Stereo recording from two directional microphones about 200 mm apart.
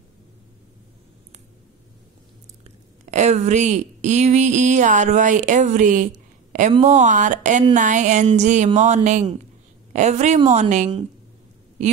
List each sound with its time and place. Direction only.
3.1 s speech: 35° right (ahead or behind)